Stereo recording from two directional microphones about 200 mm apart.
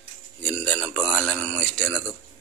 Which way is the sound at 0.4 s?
10° left (ahead or behind).